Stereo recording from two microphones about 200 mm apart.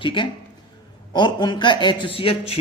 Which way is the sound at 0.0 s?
25° left (ahead or behind).